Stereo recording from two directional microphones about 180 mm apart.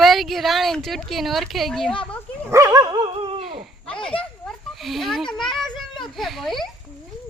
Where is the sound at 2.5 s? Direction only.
20° right (ahead or behind).